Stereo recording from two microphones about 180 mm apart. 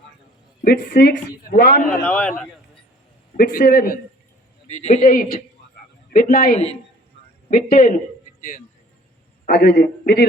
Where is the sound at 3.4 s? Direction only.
55° left (ahead or behind).